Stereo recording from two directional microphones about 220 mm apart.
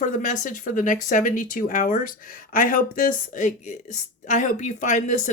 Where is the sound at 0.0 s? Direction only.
35° left (ahead or behind).